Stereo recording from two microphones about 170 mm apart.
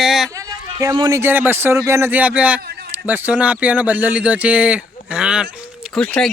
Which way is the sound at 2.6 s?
70° right (ahead or behind).